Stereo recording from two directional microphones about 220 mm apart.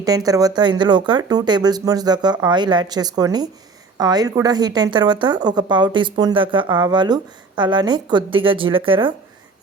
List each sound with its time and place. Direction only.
0.0 s a woman's voice: 15° right (ahead or behind)